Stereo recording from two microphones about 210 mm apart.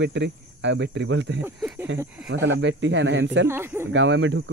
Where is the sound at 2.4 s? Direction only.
60° right (ahead or behind).